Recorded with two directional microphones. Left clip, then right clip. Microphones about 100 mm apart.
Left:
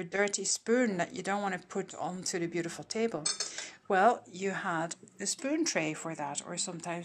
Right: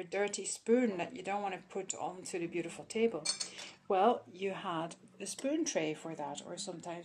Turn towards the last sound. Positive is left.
turn(degrees=-15)  # may be behind; listen again after turning